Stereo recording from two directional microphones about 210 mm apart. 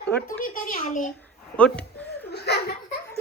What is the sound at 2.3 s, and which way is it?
Laughter, 50° left (ahead or behind).